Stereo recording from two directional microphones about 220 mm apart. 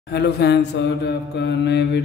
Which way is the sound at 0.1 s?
50° left (ahead or behind).